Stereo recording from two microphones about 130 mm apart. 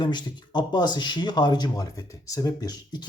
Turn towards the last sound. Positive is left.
turn(degrees=30)  # may be behind; listen again after turning